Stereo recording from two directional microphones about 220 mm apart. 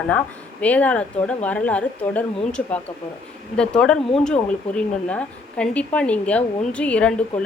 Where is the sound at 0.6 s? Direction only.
5° left (ahead or behind).